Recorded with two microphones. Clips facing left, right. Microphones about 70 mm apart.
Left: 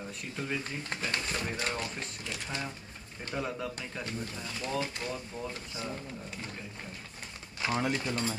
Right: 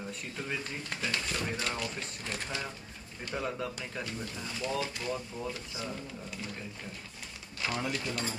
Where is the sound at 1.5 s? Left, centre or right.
Left.